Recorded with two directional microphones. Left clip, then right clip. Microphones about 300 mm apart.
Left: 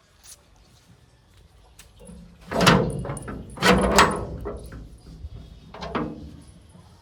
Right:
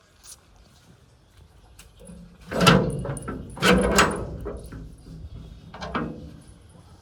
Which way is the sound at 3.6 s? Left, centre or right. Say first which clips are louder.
Left 2 dB; left.